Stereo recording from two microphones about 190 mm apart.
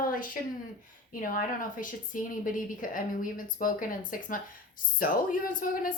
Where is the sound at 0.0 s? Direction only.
45° left (ahead or behind).